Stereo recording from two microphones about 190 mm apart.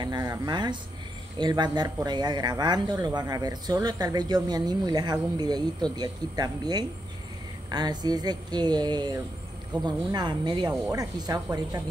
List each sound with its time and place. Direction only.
0.0 s speech: 20° right (ahead or behind)